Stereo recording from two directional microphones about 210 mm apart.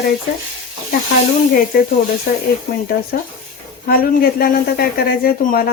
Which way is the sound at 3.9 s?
45° left (ahead or behind).